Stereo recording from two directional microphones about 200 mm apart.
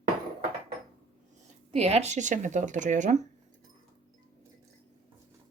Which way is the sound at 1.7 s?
30° right (ahead or behind).